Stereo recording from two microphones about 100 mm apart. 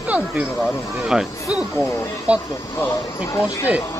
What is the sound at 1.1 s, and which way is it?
Speech, 10° right (ahead or behind).